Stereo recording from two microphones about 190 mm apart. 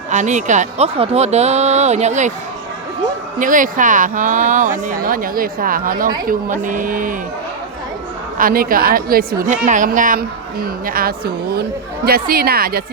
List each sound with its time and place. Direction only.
0.1 s speech: 40° right (ahead or behind)
3.3 s a woman's voice: 45° right (ahead or behind)
8.4 s a woman's voice: 50° right (ahead or behind)